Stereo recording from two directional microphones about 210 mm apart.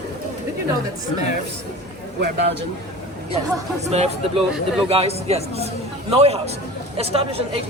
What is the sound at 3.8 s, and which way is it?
A man's voice, 30° right (ahead or behind).